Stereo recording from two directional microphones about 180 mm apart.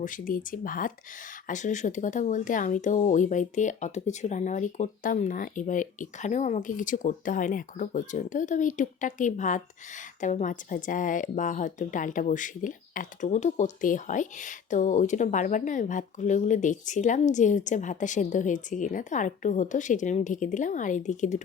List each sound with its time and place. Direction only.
0.0 s speech: 50° left (ahead or behind)